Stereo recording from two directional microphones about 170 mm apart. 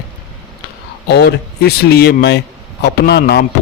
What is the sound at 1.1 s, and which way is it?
A man's voice, 75° left (ahead or behind).